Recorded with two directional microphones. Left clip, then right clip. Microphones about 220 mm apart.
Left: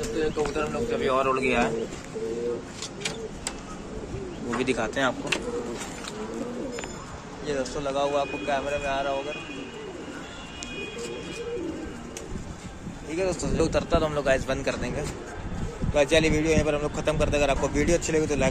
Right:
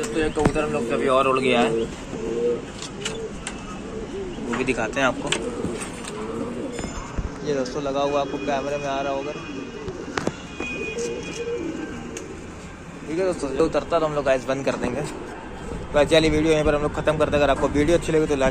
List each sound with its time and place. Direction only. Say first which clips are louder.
0.2 s speech: right 5 dB; 10° right (ahead or behind)
4.6 s a man's voice: right 3 dB; 20° left (ahead or behind)
7.4 s a man's voice: right 4 dB; centre (ahead or behind)
13.1 s a man's voice: right 4 dB; 5° left (ahead or behind)